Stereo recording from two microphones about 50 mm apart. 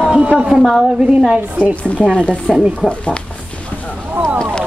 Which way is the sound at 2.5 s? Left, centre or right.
Centre.